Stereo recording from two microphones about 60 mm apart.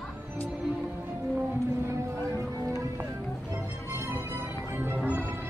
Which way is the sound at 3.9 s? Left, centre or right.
Right.